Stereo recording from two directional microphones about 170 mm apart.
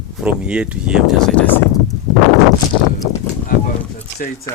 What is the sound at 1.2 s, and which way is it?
Speech, 5° left (ahead or behind).